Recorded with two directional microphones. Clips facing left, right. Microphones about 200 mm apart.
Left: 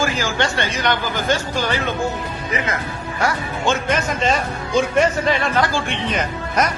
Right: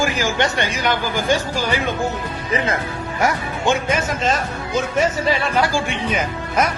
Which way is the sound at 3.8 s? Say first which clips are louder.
Left 1 dB; 5° right (ahead or behind).